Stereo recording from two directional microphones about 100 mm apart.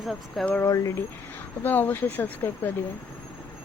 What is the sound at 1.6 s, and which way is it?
Speech, 20° left (ahead or behind).